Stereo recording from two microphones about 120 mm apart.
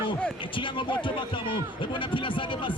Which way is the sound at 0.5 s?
45° left (ahead or behind).